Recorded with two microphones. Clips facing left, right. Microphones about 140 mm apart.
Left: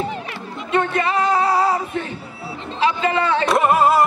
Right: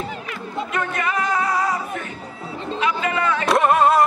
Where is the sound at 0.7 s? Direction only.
30° left (ahead or behind).